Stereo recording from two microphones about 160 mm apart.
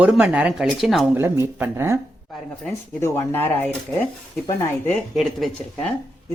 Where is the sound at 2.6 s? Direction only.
15° left (ahead or behind).